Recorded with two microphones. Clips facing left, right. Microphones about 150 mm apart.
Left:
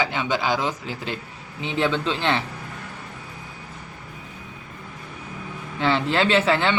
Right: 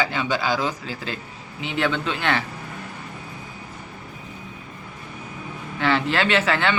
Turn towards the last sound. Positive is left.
turn(degrees=25)  # may be behind; listen again after turning